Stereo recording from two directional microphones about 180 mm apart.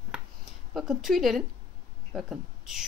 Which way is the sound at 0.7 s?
Centre (ahead or behind).